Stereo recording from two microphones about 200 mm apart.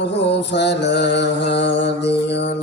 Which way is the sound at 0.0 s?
60° left (ahead or behind).